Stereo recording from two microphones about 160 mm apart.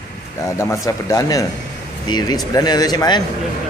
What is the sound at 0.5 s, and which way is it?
Speech, 20° left (ahead or behind).